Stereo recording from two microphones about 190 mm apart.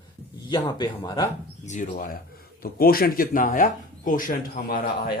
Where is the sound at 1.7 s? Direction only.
45° left (ahead or behind).